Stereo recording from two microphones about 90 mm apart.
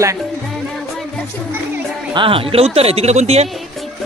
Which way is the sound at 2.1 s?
75° right (ahead or behind).